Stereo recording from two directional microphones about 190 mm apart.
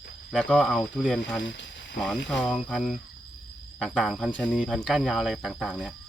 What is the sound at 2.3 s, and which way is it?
Speech, centre (ahead or behind).